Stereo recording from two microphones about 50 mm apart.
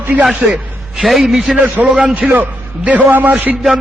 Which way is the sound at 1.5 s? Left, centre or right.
Right.